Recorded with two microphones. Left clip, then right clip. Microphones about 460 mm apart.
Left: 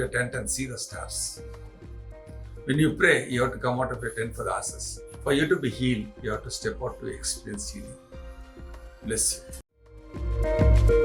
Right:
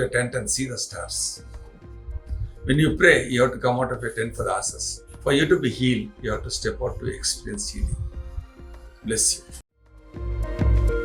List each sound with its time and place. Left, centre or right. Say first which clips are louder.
0.1 s speech: right 4 dB; left
2.6 s speech: right 4 dB; left
9.0 s speech: right 5 dB; left
10.1 s music: left 7 dB; centre